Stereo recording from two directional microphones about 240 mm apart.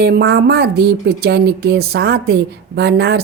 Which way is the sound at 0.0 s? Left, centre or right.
Right.